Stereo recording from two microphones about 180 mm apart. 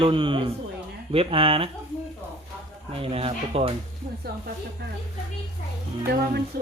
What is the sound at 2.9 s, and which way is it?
Speech, 30° right (ahead or behind).